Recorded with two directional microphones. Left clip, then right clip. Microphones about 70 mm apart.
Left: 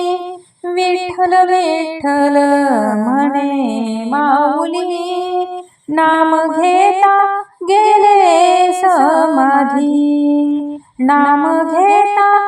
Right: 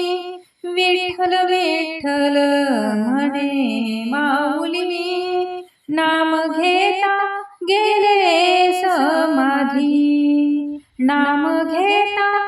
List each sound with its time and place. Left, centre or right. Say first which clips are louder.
0.8 s music: left 3 dB; left
7.0 s child singing: left 8 dB; left
7.8 s music: left 7 dB; left